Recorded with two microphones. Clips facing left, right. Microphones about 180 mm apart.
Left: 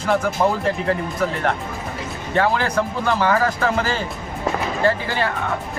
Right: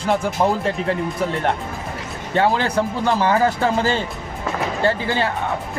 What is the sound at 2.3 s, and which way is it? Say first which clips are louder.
Speech: right 1 dB; 30° right (ahead or behind).